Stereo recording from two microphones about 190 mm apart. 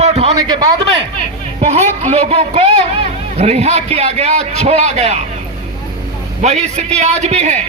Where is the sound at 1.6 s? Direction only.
35° right (ahead or behind).